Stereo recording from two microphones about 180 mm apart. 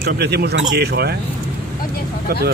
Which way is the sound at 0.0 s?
65° right (ahead or behind).